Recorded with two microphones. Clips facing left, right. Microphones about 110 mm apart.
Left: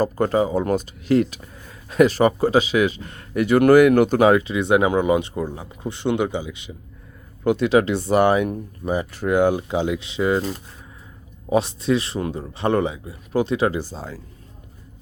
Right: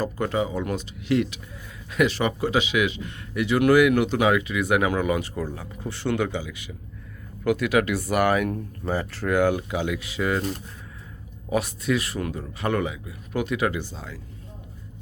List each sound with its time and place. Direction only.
0.0 s speech: 40° left (ahead or behind); by 10.4 s 25° left (ahead or behind)
11.4 s speech: 25° left (ahead or behind)